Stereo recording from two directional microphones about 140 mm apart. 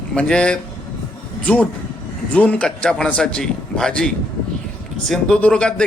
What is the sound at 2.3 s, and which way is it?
A man's voice, 10° left (ahead or behind).